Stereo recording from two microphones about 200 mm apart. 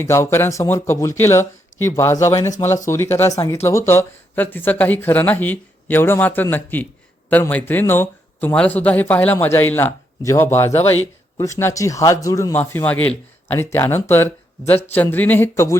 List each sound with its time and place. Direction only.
0.0 s speech: 15° left (ahead or behind)